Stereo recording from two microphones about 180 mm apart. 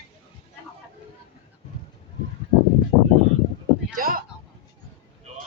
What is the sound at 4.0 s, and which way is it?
Speech, 55° right (ahead or behind).